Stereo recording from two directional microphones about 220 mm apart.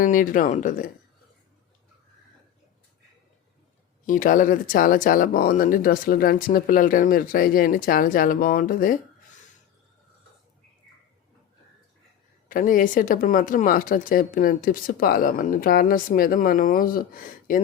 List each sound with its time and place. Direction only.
0.0 s speech: 40° left (ahead or behind)
4.0 s speech: 35° left (ahead or behind)
12.5 s speech: 40° left (ahead or behind)